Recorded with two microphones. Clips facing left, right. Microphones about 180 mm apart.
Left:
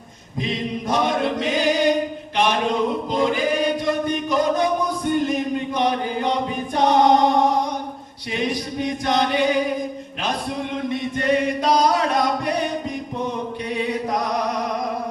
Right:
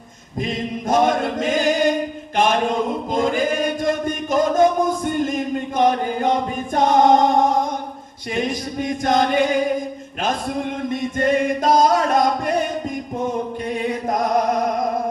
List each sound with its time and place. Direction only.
0.3 s chant: 45° right (ahead or behind)
6.7 s choir: 50° right (ahead or behind)
8.4 s chant: 45° right (ahead or behind)
10.8 s chant: 45° right (ahead or behind)
13.1 s music: 45° right (ahead or behind)